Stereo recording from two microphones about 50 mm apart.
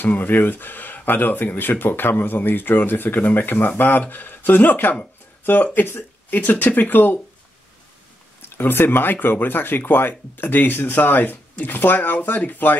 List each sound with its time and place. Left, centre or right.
0.0 s speech: left
8.4 s speech: left